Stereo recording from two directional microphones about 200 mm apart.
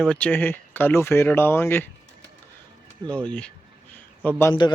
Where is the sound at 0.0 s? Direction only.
5° left (ahead or behind).